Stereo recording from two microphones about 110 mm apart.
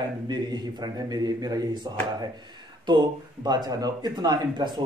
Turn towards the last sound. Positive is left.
turn(degrees=-40)  # may be behind; listen again after turning